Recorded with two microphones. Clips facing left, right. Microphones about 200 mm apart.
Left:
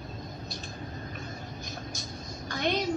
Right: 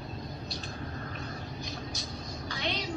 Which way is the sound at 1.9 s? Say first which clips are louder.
Right 1 dB; 50° left (ahead or behind).